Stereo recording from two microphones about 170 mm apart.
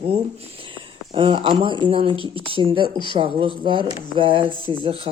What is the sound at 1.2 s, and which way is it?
Speech, 30° right (ahead or behind).